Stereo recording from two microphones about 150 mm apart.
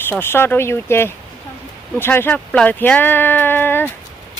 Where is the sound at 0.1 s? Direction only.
15° left (ahead or behind).